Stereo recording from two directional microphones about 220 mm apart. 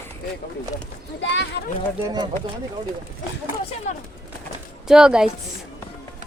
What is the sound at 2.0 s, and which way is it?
Speech, 20° right (ahead or behind).